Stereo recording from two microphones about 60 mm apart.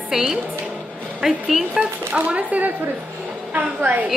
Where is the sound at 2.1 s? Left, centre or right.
Right.